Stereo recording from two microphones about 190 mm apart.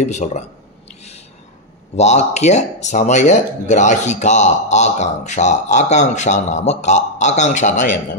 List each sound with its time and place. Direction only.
0.0 s speech: 40° left (ahead or behind)
2.0 s speech: 35° left (ahead or behind)